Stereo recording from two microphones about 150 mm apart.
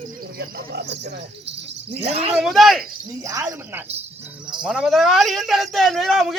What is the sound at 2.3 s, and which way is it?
Speech, centre (ahead or behind).